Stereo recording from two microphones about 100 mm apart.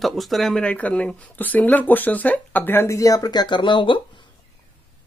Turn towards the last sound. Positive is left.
turn(degrees=55)  # may be behind; listen again after turning